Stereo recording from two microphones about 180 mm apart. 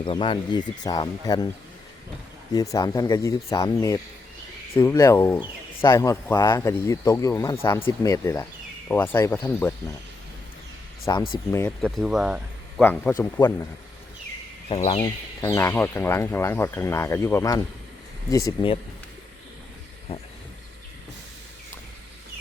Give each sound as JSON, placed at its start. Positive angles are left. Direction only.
{"t": 0.0, "sound": "speech", "side_deg": 25}
{"t": 2.5, "sound": "speech", "side_deg": 20}
{"t": 11.0, "sound": "speech", "side_deg": 25}
{"t": 11.8, "sound": "speech", "side_deg": 0}
{"t": 12.8, "sound": "speech", "side_deg": 10}
{"t": 14.8, "sound": "speech", "side_deg": 30}
{"t": 15.4, "sound": "speech", "side_deg": 15}